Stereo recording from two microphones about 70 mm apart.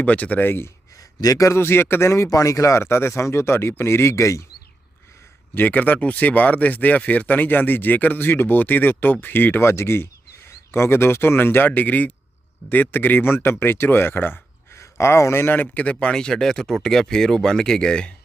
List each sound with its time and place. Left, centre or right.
0.0 s speech: left
1.2 s speech: left
1.6 s speech: left
5.5 s speech: left
14.8 s speech: left; by 18.1 s centre